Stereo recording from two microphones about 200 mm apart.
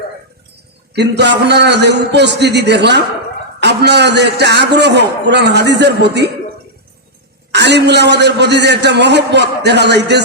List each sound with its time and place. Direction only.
0.9 s a man's voice: 60° right (ahead or behind)
7.5 s a man's voice: 60° right (ahead or behind)